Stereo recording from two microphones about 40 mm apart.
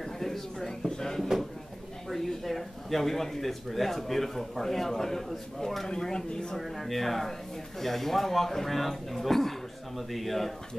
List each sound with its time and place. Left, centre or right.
0.0 s drawer open or close: centre
2.0 s speech: centre
6.5 s speech: centre